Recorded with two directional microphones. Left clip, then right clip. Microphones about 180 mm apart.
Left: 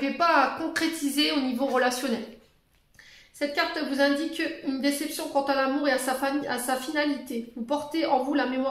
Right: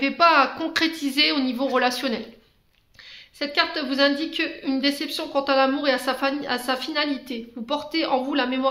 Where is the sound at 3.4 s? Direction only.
35° right (ahead or behind).